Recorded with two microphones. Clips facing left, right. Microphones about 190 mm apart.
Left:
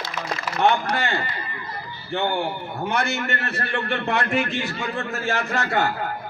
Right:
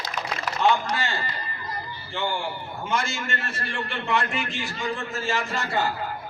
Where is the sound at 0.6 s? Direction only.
60° left (ahead or behind).